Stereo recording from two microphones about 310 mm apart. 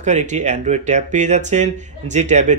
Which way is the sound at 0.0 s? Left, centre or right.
Right.